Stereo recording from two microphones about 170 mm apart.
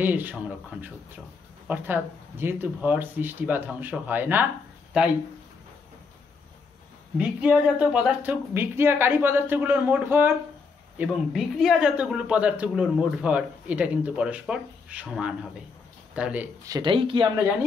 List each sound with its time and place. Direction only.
0.0 s speech: 10° right (ahead or behind)
7.2 s speech: 5° right (ahead or behind)
11.0 s speech: centre (ahead or behind)
16.6 s speech: 25° right (ahead or behind)